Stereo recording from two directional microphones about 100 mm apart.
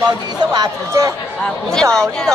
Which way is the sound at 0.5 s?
40° right (ahead or behind).